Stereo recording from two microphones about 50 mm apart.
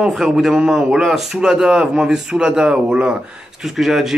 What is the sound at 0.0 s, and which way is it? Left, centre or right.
Speech, centre.